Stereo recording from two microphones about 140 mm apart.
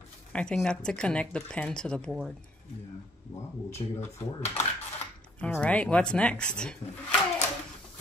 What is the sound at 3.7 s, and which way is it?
Speech, 20° left (ahead or behind).